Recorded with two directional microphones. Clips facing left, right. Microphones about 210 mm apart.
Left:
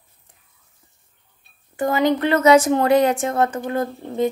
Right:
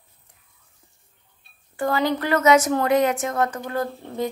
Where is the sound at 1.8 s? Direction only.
20° left (ahead or behind).